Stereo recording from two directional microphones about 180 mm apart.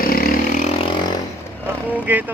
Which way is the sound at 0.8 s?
25° left (ahead or behind).